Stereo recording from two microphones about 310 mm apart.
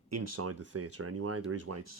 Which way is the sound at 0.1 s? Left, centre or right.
Right.